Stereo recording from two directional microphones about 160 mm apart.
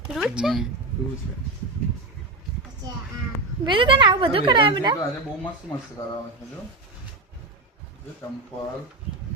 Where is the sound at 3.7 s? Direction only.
35° right (ahead or behind).